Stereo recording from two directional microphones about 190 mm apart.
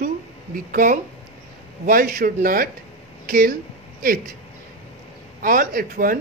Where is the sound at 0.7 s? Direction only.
45° right (ahead or behind).